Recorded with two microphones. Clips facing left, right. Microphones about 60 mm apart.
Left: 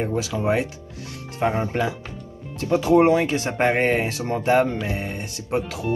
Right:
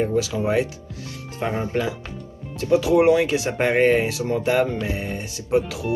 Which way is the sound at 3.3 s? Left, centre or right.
Centre.